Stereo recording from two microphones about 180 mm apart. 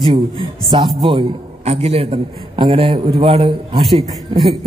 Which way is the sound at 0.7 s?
25° right (ahead or behind).